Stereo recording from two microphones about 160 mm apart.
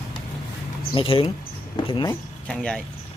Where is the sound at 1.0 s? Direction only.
35° left (ahead or behind).